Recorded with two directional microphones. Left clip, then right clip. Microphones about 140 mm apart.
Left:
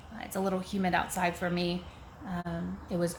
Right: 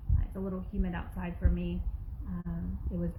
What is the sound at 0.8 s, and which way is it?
Speech, 35° left (ahead or behind).